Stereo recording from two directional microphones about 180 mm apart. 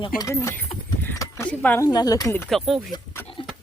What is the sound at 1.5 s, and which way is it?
Speech, 10° left (ahead or behind).